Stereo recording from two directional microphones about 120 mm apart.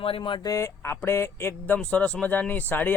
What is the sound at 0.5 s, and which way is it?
A man's voice, 25° left (ahead or behind).